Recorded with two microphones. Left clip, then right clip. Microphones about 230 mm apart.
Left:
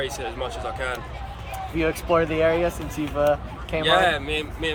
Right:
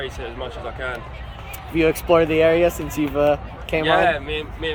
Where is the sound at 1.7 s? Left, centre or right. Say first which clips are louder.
Right 5 dB; right.